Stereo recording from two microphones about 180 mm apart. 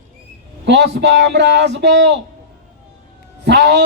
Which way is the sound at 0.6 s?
70° right (ahead or behind).